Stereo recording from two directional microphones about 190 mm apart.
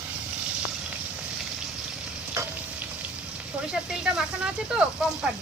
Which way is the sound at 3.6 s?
5° right (ahead or behind).